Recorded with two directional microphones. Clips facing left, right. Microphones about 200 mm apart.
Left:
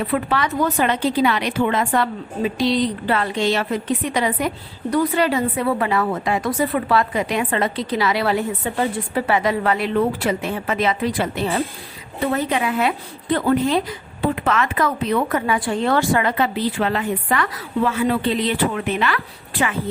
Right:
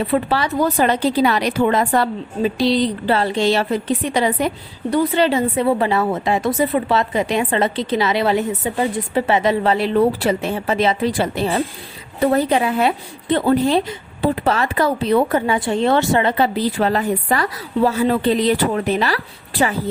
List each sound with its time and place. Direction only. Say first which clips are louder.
0.0 s a woman's voice: right 2 dB; 30° right (ahead or behind)